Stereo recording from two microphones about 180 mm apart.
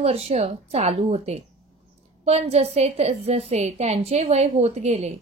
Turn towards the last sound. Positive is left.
turn(degrees=-35)  # may be behind; listen again after turning